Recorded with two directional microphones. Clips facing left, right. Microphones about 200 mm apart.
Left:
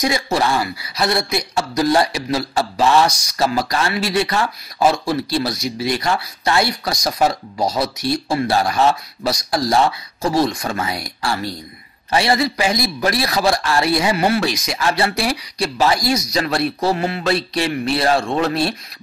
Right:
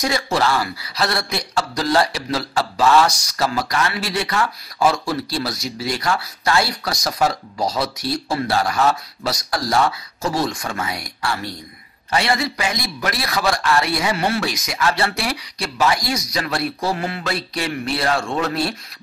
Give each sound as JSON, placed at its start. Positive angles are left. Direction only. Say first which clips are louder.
{"t": 0.0, "sound": "a man's voice", "louder": "left 1 dB", "side_deg": 15}
{"t": 10.8, "sound": "a man's voice", "louder": "left 2 dB", "side_deg": 35}